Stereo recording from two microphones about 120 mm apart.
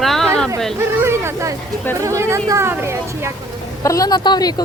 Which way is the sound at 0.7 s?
20° right (ahead or behind).